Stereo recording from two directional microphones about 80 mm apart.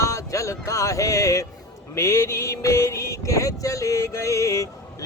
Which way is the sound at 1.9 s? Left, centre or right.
Left.